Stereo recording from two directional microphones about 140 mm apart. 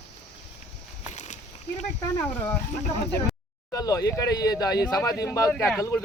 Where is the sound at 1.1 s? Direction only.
55° left (ahead or behind).